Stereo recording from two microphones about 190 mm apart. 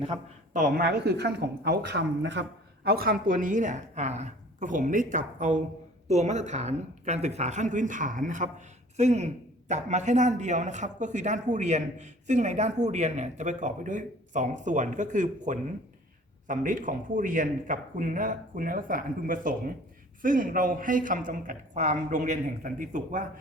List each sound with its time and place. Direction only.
0.5 s speech: 50° right (ahead or behind)
2.8 s a woman's voice: 50° right (ahead or behind)